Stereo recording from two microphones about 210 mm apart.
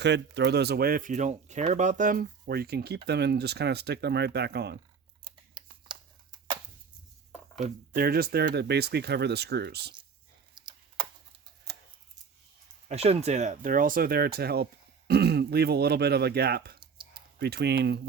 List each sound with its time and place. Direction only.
0.0 s speech: 55° right (ahead or behind)
5.2 s typing: 20° right (ahead or behind)
7.6 s speech: 45° right (ahead or behind)
10.5 s computer keyboard: 20° right (ahead or behind)
12.9 s speech: 30° right (ahead or behind); by 16.8 s 45° right (ahead or behind)
16.8 s a sound: 25° right (ahead or behind)
17.4 s speech: 50° right (ahead or behind)